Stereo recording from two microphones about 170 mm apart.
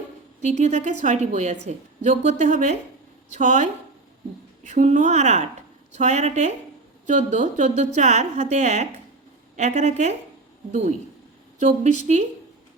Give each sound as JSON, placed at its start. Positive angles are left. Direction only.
{"t": 0.4, "sound": "a woman's voice", "side_deg": -40}